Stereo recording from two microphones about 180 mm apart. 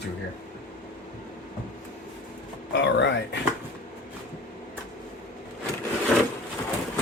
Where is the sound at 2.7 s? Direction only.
85° left.